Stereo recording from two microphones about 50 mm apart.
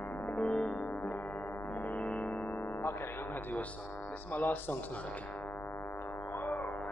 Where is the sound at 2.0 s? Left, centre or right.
Centre.